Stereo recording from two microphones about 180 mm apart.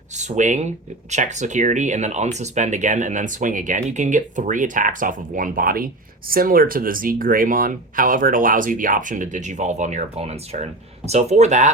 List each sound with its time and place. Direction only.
0.1 s speech: 40° right (ahead or behind)